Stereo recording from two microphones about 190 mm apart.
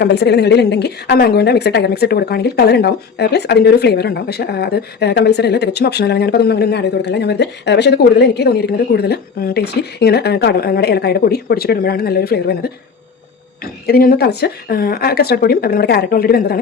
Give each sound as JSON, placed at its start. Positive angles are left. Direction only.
{"t": 0.0, "sound": "a woman's voice", "side_deg": 65}
{"t": 13.8, "sound": "speech", "side_deg": 50}